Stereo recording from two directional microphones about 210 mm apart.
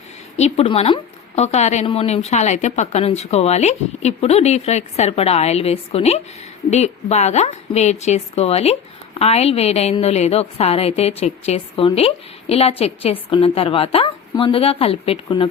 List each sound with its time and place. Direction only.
0.3 s a woman's voice: 30° left (ahead or behind)